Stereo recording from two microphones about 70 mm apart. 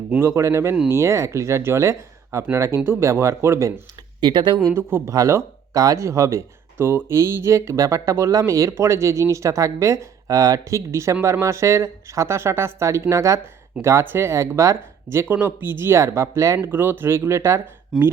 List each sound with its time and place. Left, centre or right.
0.2 s speech: right
4.2 s speech: right
4.8 s speech: right
5.1 s speech: right
6.8 s speech: right
13.8 s speech: right
15.3 s speech: right
16.6 s speech: right
17.9 s speech: centre